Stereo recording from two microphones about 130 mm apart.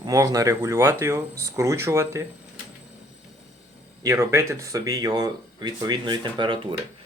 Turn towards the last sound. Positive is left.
turn(degrees=-40)  # may be behind; listen again after turning